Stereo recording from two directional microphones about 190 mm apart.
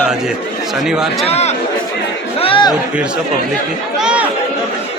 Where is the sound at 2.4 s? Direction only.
25° left (ahead or behind).